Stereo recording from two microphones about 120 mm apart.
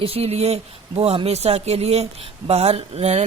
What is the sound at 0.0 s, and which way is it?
Speech, 55° right (ahead or behind).